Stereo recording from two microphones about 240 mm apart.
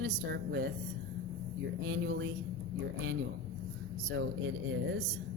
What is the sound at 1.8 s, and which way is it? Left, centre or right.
Speech, right.